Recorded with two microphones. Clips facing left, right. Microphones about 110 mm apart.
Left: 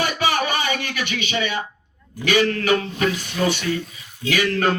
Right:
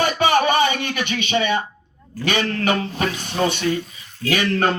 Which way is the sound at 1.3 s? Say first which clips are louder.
Right 7 dB; 40° right (ahead or behind).